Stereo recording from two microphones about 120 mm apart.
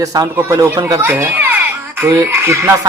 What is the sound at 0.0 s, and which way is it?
Speech, 30° right (ahead or behind).